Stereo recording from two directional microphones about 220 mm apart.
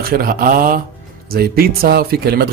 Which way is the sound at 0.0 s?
40° right (ahead or behind).